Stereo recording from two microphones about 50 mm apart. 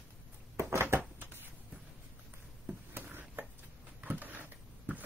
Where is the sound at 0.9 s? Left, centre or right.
Right.